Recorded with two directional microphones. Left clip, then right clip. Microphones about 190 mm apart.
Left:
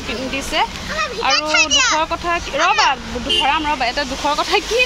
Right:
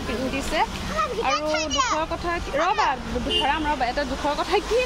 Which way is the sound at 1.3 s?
25° right (ahead or behind).